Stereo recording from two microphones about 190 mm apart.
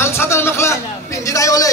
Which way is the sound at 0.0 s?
15° left (ahead or behind).